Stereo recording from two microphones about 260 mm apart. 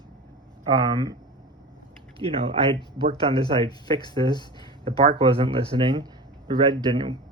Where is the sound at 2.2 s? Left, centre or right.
Right.